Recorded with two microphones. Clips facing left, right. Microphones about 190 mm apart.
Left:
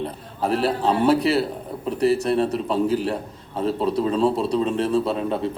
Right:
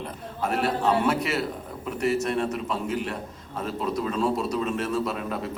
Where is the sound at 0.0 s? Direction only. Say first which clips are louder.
Left 4 dB; 35° left (ahead or behind).